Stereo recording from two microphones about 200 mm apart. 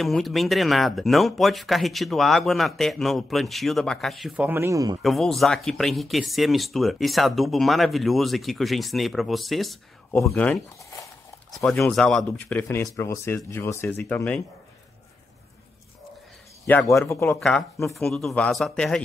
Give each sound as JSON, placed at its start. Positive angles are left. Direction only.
{"t": 0.0, "sound": "speech", "side_deg": 0}
{"t": 5.0, "sound": "speech", "side_deg": 0}
{"t": 11.5, "sound": "speech", "side_deg": 0}
{"t": 16.6, "sound": "speech", "side_deg": 10}